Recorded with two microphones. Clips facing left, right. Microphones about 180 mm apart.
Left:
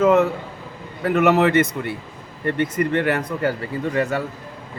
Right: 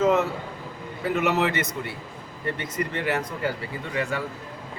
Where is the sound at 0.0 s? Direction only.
55° left (ahead or behind).